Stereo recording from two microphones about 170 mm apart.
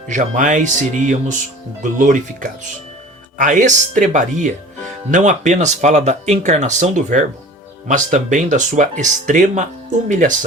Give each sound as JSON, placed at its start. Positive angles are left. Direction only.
{"t": 0.1, "sound": "speech", "side_deg": -45}